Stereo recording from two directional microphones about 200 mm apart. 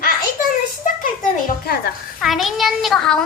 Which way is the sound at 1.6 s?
50° left (ahead or behind).